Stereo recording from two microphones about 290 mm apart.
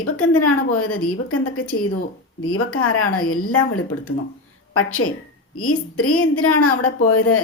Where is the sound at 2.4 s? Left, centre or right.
Left.